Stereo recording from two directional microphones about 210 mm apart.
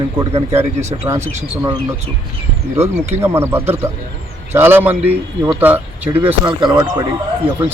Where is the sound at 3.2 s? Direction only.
10° right (ahead or behind).